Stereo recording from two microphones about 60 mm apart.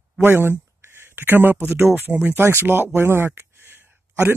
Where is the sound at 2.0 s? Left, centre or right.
Right.